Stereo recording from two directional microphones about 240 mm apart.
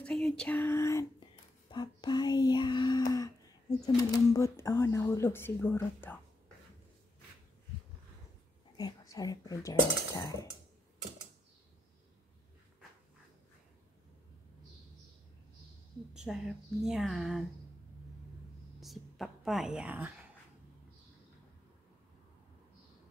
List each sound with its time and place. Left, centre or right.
0.0 s speech: centre
8.7 s speech: centre
16.1 s a woman's voice: centre
18.8 s a woman's voice: centre